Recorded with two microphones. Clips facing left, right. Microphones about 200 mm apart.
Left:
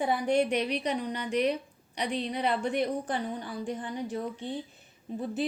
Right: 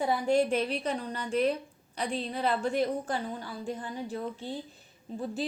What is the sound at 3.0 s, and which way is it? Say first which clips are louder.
Speech: left 1 dB; 20° left (ahead or behind).